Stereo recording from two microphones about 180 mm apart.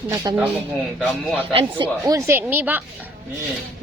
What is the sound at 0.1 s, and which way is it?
Speech, 20° right (ahead or behind).